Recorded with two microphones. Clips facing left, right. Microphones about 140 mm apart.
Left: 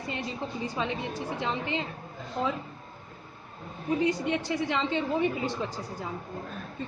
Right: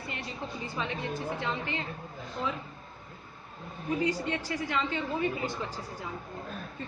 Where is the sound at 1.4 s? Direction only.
15° left (ahead or behind).